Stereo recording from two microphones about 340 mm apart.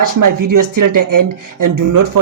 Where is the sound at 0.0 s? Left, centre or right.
Right.